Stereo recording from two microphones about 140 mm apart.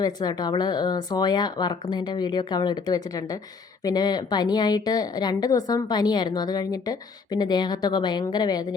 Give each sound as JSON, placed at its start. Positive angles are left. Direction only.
{"t": 0.0, "sound": "a woman's voice", "side_deg": 30}